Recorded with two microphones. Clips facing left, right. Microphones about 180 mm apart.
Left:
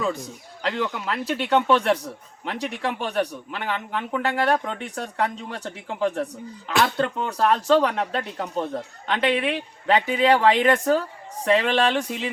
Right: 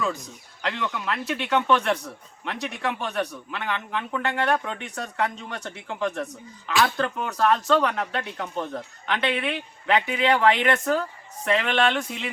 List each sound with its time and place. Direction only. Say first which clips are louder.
0.6 s speech: left 3 dB; 35° left (ahead or behind)